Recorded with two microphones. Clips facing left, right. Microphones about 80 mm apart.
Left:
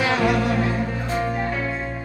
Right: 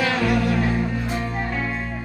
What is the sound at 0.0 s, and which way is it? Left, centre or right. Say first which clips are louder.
Music: left 1 dB; left.